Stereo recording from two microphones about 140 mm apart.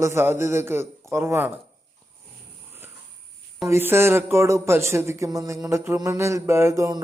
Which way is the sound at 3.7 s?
15° right (ahead or behind).